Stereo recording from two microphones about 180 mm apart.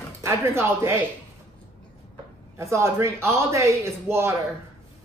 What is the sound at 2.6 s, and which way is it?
Speech, 15° right (ahead or behind).